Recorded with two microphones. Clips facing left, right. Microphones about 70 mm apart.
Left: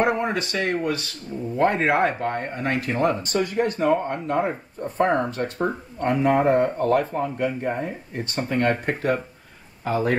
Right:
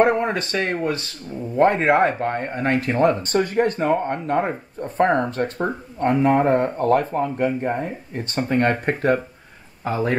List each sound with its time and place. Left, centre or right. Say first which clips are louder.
0.0 s speech: right 4 dB; right